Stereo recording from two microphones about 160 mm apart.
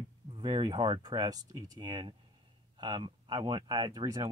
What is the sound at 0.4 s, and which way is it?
Speech, 25° right (ahead or behind).